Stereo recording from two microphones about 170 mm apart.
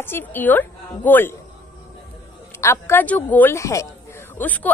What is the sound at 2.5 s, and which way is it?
Speech, 15° left (ahead or behind).